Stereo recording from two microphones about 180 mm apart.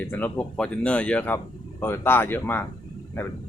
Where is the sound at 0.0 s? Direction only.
10° left (ahead or behind).